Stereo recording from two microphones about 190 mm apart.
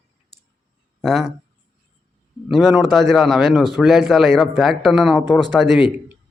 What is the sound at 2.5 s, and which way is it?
Speech, centre (ahead or behind).